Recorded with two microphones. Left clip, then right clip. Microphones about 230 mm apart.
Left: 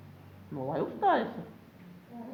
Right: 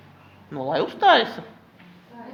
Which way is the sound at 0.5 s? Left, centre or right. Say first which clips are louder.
Right 9 dB; right.